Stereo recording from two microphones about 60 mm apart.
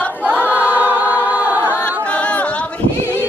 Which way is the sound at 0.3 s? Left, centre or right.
Left.